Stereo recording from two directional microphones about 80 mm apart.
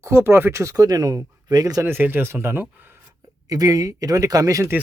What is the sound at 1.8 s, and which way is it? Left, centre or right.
Speech, right.